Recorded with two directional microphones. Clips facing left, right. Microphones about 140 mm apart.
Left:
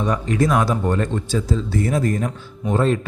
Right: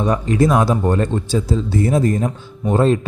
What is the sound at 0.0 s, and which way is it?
Speech, 35° right (ahead or behind).